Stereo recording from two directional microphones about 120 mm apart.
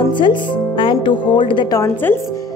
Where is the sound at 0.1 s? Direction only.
40° left (ahead or behind).